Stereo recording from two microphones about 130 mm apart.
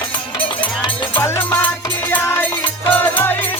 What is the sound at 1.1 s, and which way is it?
Music, 20° left (ahead or behind).